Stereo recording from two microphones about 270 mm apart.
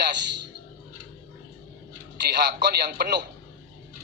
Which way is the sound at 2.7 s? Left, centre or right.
Right.